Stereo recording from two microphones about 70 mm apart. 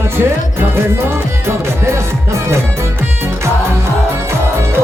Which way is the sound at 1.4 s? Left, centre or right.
Right.